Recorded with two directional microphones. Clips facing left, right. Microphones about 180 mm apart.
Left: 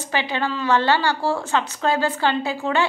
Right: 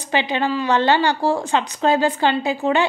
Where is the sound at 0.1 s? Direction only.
20° right (ahead or behind).